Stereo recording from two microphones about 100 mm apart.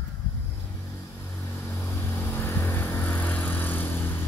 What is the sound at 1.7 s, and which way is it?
Vehicle, 20° left (ahead or behind).